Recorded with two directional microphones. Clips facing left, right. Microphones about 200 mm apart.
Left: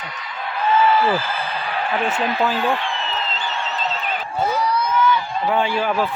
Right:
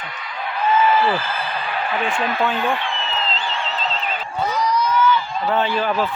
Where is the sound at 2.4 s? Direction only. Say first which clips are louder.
Left 1 dB; centre (ahead or behind).